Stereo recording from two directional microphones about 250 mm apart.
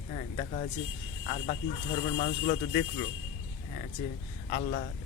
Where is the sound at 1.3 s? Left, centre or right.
Left.